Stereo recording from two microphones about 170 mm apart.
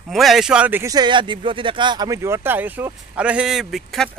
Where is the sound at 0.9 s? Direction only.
25° right (ahead or behind); by 4.1 s centre (ahead or behind).